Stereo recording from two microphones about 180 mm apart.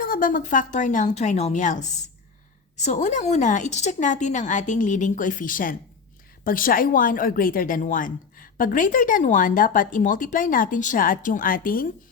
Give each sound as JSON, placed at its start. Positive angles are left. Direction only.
{"t": 0.0, "sound": "a woman's voice", "side_deg": 50}